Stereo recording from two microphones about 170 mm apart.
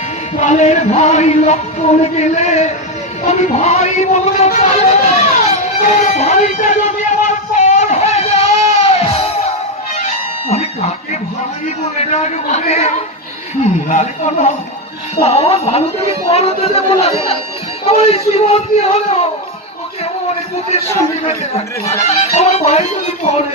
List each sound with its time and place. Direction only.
0.4 s music: 45° left (ahead or behind)
12.0 s music: 40° left (ahead or behind)
13.8 s speech: 45° left (ahead or behind)
15.2 s music: 35° left (ahead or behind)
21.2 s music: 35° left (ahead or behind)